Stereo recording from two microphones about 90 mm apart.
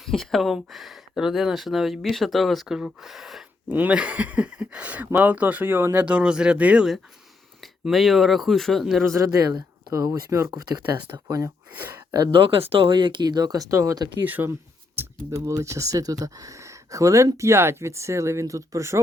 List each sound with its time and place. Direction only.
0.0 s speech: 5° left (ahead or behind)
3.7 s speech: 15° right (ahead or behind)
7.6 s speech: centre (ahead or behind)
9.0 s speech: 35° right (ahead or behind)
10.1 s speech: 35° right (ahead or behind)
11.7 s speech: 25° right (ahead or behind)
12.3 s speech: 75° right (ahead or behind); by 14.0 s 35° right (ahead or behind)
14.3 s speech: 20° right (ahead or behind)
15.3 s speech: 35° right (ahead or behind)